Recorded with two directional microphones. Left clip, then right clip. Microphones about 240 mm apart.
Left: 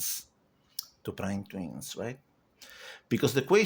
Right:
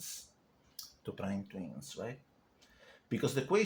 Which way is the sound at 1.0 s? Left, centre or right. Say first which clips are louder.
Left 5 dB; left.